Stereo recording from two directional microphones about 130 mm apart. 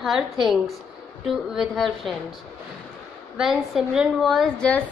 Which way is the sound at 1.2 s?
Centre (ahead or behind).